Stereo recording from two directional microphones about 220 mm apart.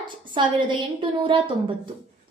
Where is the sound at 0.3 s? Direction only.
20° right (ahead or behind).